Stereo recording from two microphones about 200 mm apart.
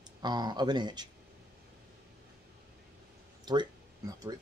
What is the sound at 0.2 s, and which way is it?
Speech, 20° right (ahead or behind).